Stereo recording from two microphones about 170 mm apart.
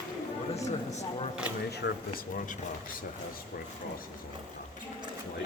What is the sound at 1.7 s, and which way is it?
Speech, 75° left (ahead or behind).